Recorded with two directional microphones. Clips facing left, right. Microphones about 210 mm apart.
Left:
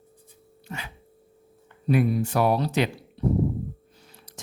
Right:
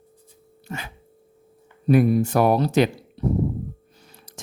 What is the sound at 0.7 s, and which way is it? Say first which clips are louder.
Speech: right 4 dB; 45° right (ahead or behind).